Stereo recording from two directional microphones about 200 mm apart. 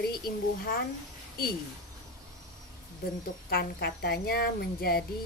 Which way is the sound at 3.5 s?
50° left (ahead or behind).